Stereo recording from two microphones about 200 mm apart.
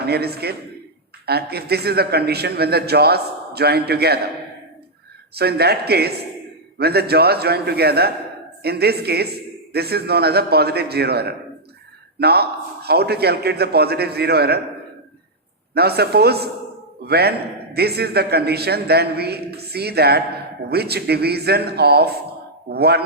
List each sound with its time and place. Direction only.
0.0 s speech: 50° right (ahead or behind)
5.3 s speech: 55° right (ahead or behind)
15.7 s speech: 55° right (ahead or behind)